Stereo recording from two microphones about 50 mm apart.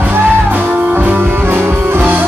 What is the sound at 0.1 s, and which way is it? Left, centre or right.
Music, right.